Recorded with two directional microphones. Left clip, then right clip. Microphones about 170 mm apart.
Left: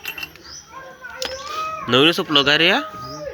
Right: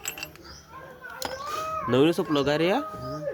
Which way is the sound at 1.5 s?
70° right (ahead or behind).